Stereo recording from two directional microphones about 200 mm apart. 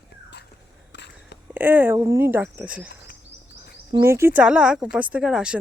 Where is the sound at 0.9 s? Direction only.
60° left (ahead or behind).